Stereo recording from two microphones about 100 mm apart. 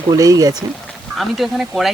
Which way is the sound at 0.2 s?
35° right (ahead or behind).